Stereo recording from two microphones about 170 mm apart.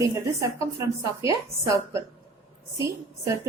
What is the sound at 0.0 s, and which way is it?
A woman's voice, 20° right (ahead or behind).